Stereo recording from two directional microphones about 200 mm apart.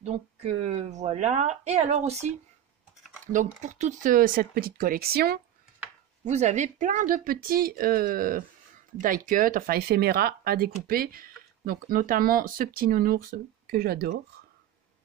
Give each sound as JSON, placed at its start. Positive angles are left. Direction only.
{"t": 0.0, "sound": "speech", "side_deg": -30}
{"t": 6.2, "sound": "speech", "side_deg": -35}